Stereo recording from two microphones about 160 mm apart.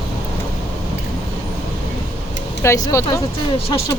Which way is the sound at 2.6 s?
20° left (ahead or behind).